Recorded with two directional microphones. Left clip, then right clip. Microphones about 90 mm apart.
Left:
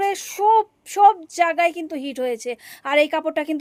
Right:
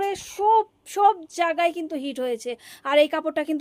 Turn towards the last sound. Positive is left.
turn(degrees=20)  # may be behind; listen again after turning